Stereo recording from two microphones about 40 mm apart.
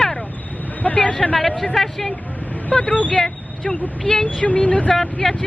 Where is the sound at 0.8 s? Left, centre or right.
Left.